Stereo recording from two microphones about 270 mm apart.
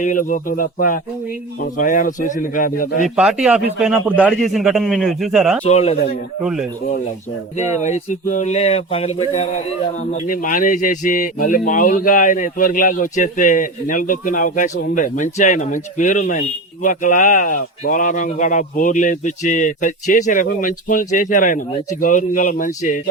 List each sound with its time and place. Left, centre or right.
0.0 s a man's voice: left
3.2 s a man's voice: centre
5.6 s a man's voice: left
6.4 s a man's voice: centre
7.8 s a man's voice: left